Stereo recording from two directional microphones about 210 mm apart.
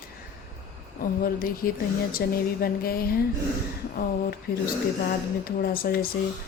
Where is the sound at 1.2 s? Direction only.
45° left (ahead or behind).